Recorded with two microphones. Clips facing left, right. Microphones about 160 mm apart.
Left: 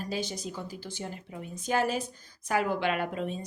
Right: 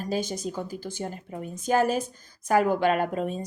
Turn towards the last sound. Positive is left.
turn(degrees=-45)  # may be behind; listen again after turning